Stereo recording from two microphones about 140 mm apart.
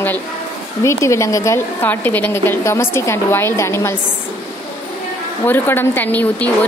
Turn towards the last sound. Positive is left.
turn(degrees=10)  # may be behind; listen again after turning